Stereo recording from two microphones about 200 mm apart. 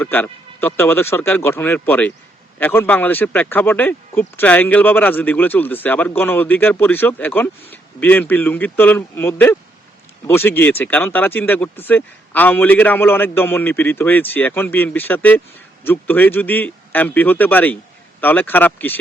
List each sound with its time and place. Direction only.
0.0 s speech: 10° left (ahead or behind)